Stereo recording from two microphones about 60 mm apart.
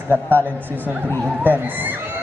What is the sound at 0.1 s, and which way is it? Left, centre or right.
Speech, right.